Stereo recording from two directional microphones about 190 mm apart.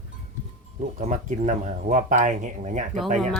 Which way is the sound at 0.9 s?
40° right (ahead or behind).